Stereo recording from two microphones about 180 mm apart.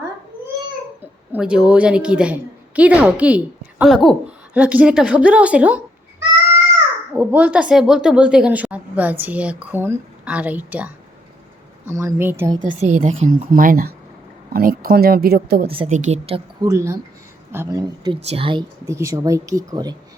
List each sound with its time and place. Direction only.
1.3 s a woman's voice: 5° right (ahead or behind)
12.8 s speech: 45° right (ahead or behind); by 15.6 s 60° right (ahead or behind)
15.6 s speech: 30° right (ahead or behind)
16.6 s a woman's voice: 15° right (ahead or behind)
18.2 s speech: 35° right (ahead or behind)
18.9 s speech: 15° right (ahead or behind)